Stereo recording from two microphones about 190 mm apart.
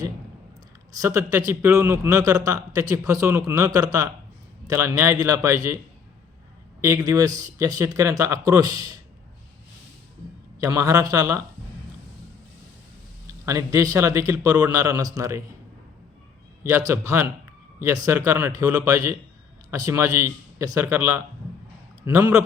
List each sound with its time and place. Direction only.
0.9 s a man's voice: 15° right (ahead or behind)
6.8 s a man's voice: 20° right (ahead or behind)
10.6 s a man's voice: 15° right (ahead or behind)
13.4 s a man's voice: 15° right (ahead or behind)
16.6 s a man's voice: 15° right (ahead or behind)